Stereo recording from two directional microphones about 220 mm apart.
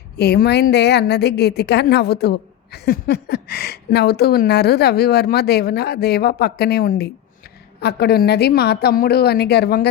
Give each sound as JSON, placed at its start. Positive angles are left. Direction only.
{"t": 0.2, "sound": "a woman's voice", "side_deg": 45}